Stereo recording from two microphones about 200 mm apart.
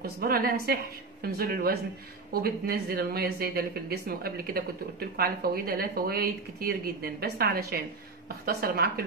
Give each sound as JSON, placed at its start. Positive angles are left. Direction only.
{"t": 0.0, "sound": "speech", "side_deg": -50}